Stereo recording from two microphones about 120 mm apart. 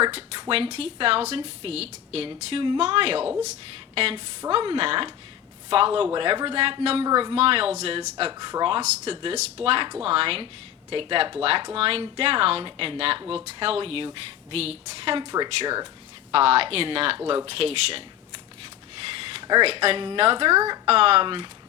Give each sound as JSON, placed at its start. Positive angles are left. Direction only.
{"t": 0.0, "sound": "a woman's voice", "side_deg": -45}
{"t": 8.3, "sound": "speech", "side_deg": -35}
{"t": 8.8, "sound": "a woman's voice", "side_deg": -60}
{"t": 15.2, "sound": "speech", "side_deg": -40}
{"t": 16.3, "sound": "a woman's voice", "side_deg": -55}
{"t": 19.2, "sound": "a sound", "side_deg": -40}
{"t": 19.6, "sound": "a woman's voice", "side_deg": -55}